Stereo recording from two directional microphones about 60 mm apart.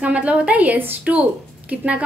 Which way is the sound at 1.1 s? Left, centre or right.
Right.